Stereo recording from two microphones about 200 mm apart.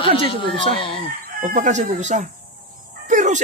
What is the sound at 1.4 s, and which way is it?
Speech, 40° right (ahead or behind).